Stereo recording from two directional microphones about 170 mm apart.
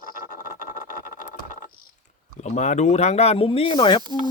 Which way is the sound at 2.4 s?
45° left (ahead or behind).